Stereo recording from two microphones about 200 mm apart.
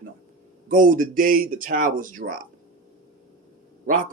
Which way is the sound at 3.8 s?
45° right (ahead or behind).